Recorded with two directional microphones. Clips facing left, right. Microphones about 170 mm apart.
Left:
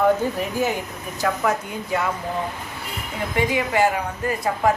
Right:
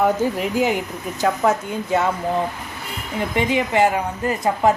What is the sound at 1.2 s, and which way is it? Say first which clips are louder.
Speech: right 3 dB; 25° right (ahead or behind).